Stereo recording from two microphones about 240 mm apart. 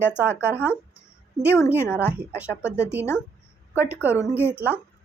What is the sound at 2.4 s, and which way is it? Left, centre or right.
Speech, centre.